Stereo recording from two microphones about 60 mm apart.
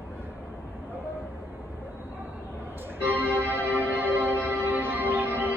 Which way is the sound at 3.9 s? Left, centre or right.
Right.